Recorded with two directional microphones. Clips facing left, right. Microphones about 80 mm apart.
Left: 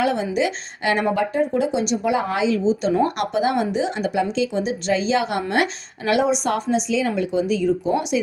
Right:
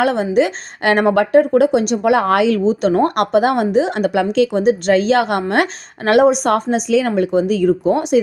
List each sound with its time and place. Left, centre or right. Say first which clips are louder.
0.0 s speech: right 6 dB; right